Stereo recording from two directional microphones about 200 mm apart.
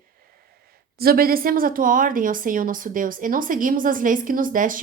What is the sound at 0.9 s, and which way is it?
Speech, 50° right (ahead or behind).